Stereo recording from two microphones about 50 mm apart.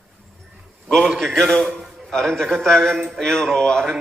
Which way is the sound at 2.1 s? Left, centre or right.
Centre.